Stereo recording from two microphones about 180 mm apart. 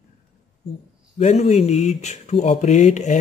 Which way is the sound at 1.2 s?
40° left (ahead or behind).